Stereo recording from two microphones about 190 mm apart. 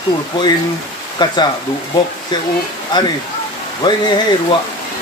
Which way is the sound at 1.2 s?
20° left (ahead or behind).